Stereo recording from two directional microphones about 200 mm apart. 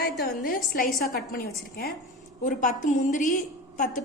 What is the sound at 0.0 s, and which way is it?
A woman's voice, 50° left (ahead or behind).